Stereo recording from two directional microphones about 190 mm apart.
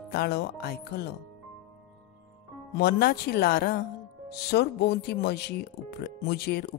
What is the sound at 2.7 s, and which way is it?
Speech, 60° left (ahead or behind).